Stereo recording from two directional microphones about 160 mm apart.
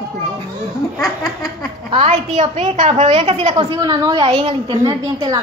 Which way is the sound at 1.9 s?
35° right (ahead or behind).